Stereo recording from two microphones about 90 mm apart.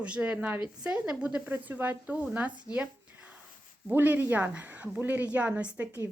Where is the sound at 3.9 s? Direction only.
20° right (ahead or behind).